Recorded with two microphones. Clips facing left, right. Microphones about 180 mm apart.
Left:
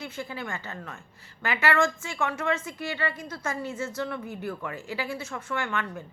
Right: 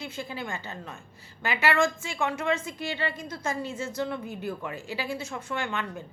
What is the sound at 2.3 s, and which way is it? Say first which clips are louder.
A woman's voice: right 1 dB; 10° right (ahead or behind).